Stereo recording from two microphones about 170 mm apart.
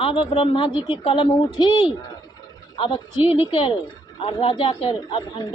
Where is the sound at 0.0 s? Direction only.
30° left (ahead or behind).